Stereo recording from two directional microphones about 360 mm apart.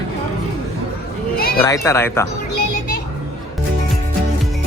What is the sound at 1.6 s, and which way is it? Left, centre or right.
Speech, centre.